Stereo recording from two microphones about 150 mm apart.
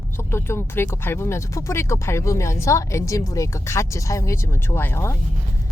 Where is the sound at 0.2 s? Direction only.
15° left (ahead or behind).